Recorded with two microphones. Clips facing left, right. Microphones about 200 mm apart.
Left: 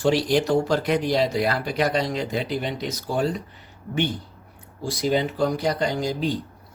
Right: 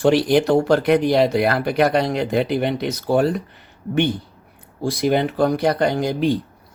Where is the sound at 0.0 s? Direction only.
55° right (ahead or behind).